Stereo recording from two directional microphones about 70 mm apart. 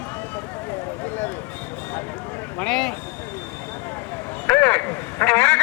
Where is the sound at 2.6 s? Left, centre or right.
Centre.